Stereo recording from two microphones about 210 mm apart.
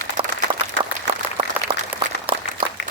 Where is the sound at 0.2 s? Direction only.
25° right (ahead or behind).